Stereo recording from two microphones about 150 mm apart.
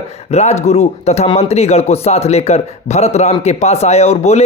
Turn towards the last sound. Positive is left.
turn(degrees=45)  # may be behind; listen again after turning